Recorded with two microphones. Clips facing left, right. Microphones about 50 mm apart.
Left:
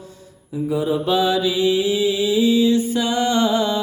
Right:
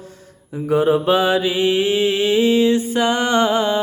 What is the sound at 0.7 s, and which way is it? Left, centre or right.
Mantra, right.